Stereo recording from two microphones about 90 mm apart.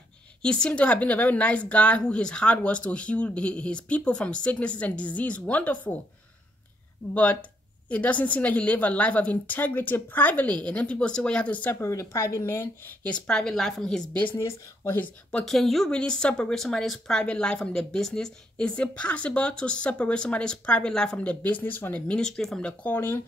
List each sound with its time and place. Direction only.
0.4 s a woman's voice: 10° left (ahead or behind)
7.9 s a woman's voice: 15° left (ahead or behind)
11.8 s speech: 35° left (ahead or behind)
13.0 s a woman's voice: 10° left (ahead or behind)
14.4 s speech: 25° left (ahead or behind)
15.3 s a woman's voice: 5° left (ahead or behind)
22.9 s speech: 25° left (ahead or behind)